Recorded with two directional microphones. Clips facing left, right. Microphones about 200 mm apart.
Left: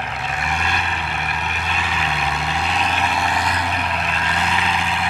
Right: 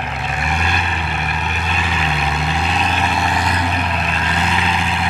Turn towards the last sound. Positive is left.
turn(degrees=-25)  # may be behind; listen again after turning